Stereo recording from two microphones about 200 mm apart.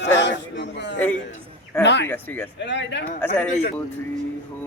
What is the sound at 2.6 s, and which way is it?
Speech, 60° left (ahead or behind).